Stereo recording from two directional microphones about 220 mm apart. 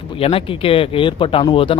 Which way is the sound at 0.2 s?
25° left (ahead or behind).